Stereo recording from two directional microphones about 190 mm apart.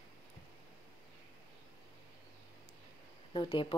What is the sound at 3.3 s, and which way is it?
Speech, 25° left (ahead or behind).